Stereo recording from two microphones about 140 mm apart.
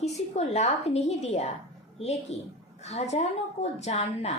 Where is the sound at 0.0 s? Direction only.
50° left (ahead or behind).